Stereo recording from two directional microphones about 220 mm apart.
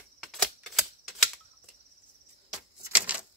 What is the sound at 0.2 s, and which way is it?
Typewriter, centre (ahead or behind).